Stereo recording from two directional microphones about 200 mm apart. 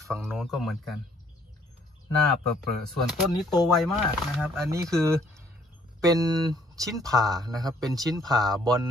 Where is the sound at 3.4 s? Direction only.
Centre (ahead or behind).